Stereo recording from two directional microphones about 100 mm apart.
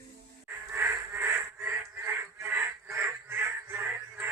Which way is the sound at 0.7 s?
20° right (ahead or behind).